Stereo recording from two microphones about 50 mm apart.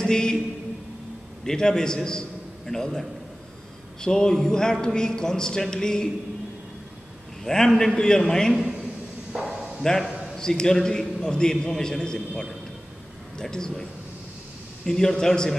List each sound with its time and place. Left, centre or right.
0.0 s a man's voice: centre
1.4 s a man's voice: centre
7.4 s a man's voice: centre
9.3 s a sound: centre
9.8 s a man's voice: centre
14.9 s a man's voice: centre